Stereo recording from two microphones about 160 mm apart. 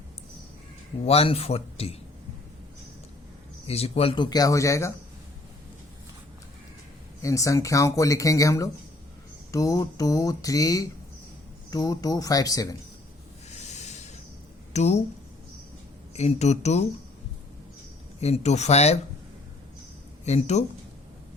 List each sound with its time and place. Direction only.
1.0 s a man's voice: 40° left (ahead or behind)
3.7 s speech: 40° left (ahead or behind); by 4.9 s 20° left (ahead or behind)
7.2 s speech: 20° left (ahead or behind)
13.6 s a sound: 45° left (ahead or behind)
14.7 s speech: 45° left (ahead or behind)
16.1 s speech: 45° left (ahead or behind)
18.2 s speech: 45° left (ahead or behind)
20.2 s speech: 45° left (ahead or behind)